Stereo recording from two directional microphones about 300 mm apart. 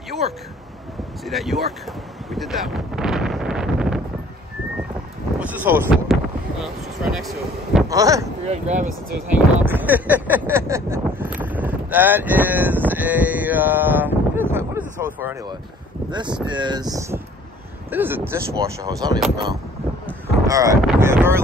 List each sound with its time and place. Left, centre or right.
1.2 s speech: centre
2.3 s wind noise: centre
5.4 s speech: centre
8.5 s speech: right
9.6 s speech: centre
20.1 s boat: centre